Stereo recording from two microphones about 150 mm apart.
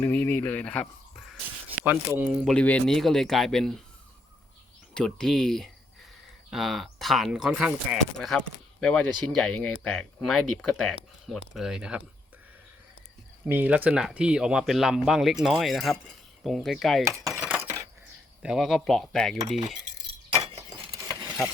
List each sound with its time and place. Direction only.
0.0 s speech: 10° left (ahead or behind)
1.8 s speech: 10° right (ahead or behind)
4.9 s speech: 5° left (ahead or behind)
13.4 s speech: 10° right (ahead or behind)
17.4 s coin: 15° right (ahead or behind)
18.4 s speech: centre (ahead or behind)
20.3 s glass: 40° right (ahead or behind)
20.7 s a sound: 25° right (ahead or behind)